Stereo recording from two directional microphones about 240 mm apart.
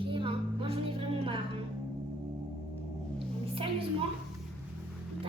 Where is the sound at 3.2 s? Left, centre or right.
Right.